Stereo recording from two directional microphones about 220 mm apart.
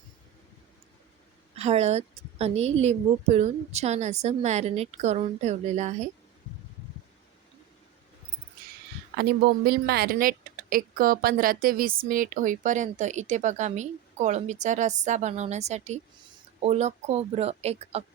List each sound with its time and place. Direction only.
1.5 s a woman's voice: 30° right (ahead or behind)
9.6 s a woman's voice: 45° right (ahead or behind); by 18.0 s 30° right (ahead or behind)